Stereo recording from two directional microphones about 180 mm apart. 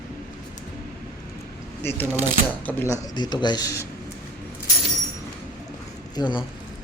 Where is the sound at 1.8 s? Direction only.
10° left (ahead or behind).